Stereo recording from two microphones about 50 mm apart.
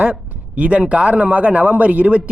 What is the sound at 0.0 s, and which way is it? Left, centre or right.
A man's voice, right.